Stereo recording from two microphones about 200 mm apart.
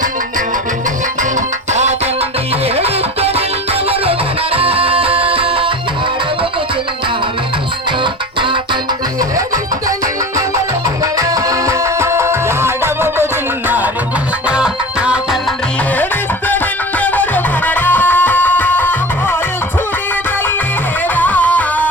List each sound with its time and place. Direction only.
1.7 s music: 35° right (ahead or behind)
8.0 s music: 25° right (ahead or behind)
11.0 s music: 15° right (ahead or behind)
17.0 s music: 10° left (ahead or behind)
21.2 s music: 10° left (ahead or behind)